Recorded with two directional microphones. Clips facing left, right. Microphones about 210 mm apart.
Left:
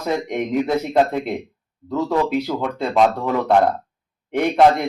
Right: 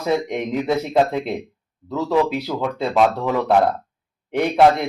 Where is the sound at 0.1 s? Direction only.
Centre (ahead or behind).